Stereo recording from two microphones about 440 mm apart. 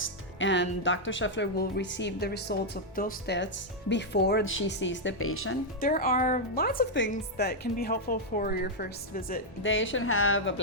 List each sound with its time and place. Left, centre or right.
0.0 s speech: left